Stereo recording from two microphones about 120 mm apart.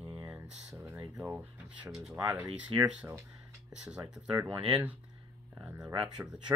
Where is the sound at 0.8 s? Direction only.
25° right (ahead or behind).